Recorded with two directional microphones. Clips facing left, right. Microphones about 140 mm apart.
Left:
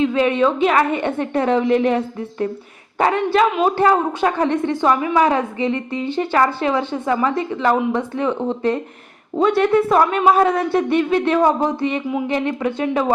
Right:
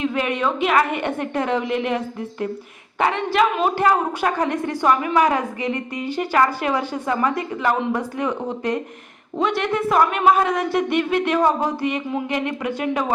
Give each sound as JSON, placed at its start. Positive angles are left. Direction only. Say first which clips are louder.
{"t": 0.0, "sound": "a woman's voice", "louder": "left 6 dB", "side_deg": 25}
{"t": 3.0, "sound": "a woman's voice", "louder": "left 3 dB", "side_deg": 35}